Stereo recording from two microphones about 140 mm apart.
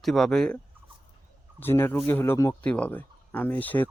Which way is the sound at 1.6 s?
15° left (ahead or behind).